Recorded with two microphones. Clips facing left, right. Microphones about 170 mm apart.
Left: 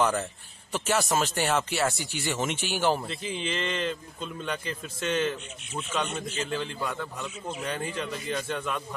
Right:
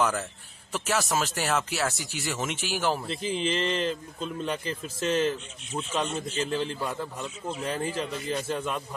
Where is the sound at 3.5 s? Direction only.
35° right (ahead or behind).